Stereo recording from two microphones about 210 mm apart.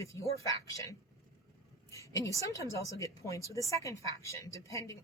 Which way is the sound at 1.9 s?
15° left (ahead or behind).